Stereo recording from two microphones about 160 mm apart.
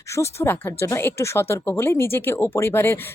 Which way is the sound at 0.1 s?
15° left (ahead or behind).